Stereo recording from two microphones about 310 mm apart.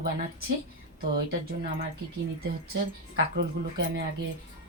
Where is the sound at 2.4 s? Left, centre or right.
Right.